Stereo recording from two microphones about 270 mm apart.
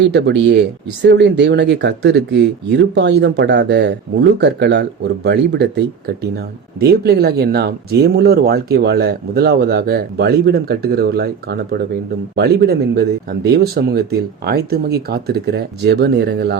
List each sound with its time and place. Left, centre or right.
0.1 s speech: right